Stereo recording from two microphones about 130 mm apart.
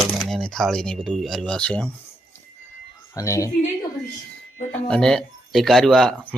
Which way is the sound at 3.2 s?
25° left (ahead or behind).